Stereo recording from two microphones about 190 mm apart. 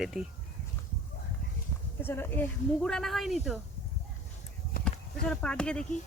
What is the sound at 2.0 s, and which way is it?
Speech, 10° left (ahead or behind).